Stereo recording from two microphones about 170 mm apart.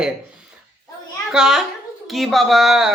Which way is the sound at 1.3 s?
5° right (ahead or behind).